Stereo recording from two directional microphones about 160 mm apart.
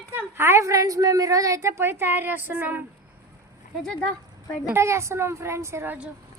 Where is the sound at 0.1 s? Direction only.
15° right (ahead or behind).